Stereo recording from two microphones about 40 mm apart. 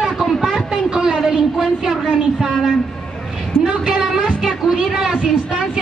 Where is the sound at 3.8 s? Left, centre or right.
Centre.